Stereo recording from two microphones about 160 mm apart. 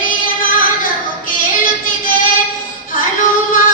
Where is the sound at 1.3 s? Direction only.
60° left (ahead or behind).